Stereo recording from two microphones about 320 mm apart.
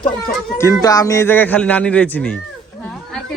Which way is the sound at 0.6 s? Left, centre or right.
Centre.